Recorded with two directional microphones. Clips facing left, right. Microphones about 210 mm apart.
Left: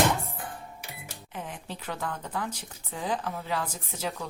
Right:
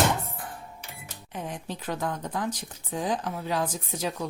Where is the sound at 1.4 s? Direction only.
15° right (ahead or behind).